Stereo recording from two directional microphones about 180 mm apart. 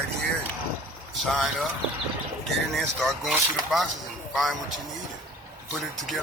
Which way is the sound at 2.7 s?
Centre (ahead or behind).